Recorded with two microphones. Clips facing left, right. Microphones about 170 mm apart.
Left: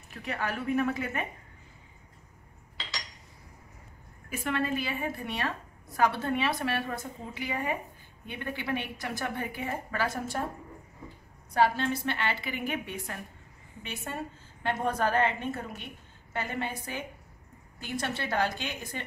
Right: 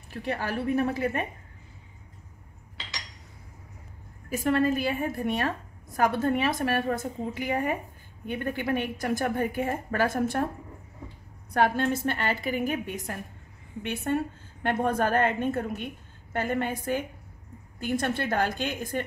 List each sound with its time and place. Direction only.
0.1 s a woman's voice: 35° right (ahead or behind)
4.3 s a woman's voice: 40° right (ahead or behind)
11.5 s a woman's voice: 55° right (ahead or behind)
13.8 s a woman's voice: 60° right (ahead or behind)